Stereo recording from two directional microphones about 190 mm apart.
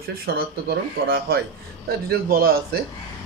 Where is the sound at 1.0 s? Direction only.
50° right (ahead or behind).